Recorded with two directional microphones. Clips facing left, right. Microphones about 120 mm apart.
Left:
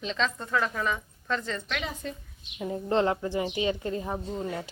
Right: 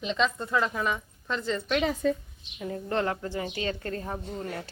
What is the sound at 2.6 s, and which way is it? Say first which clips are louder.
A woman's voice: left 3 dB; 20° left (ahead or behind).